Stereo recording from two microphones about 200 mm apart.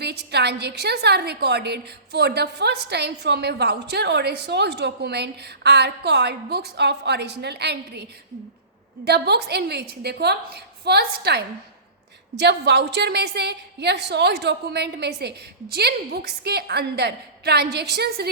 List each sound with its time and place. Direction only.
0.0 s a woman's voice: 55° right (ahead or behind)
9.0 s a woman's voice: 55° right (ahead or behind)